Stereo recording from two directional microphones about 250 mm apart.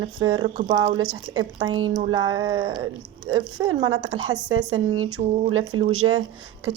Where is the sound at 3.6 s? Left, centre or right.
Right.